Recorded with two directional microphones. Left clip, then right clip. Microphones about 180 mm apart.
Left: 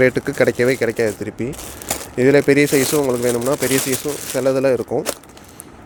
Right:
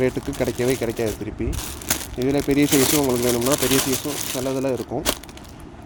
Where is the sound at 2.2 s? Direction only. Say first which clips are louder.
Left 8 dB; 80° left.